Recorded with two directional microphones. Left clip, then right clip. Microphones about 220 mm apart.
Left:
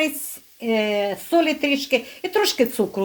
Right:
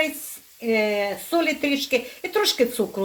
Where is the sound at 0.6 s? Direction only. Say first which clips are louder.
Left 1 dB; 30° left (ahead or behind).